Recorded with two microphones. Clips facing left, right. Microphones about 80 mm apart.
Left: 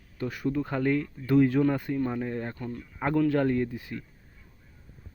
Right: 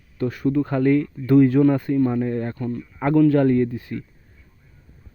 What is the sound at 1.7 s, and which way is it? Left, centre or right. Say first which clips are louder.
A man's voice: right 9 dB; centre.